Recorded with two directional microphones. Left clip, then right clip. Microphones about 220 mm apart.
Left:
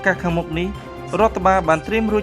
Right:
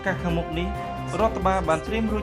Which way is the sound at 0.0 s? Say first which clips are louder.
Left 7 dB; 25° left (ahead or behind).